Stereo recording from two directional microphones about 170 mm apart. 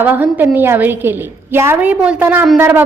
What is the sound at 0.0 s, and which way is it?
A woman's voice, 10° right (ahead or behind).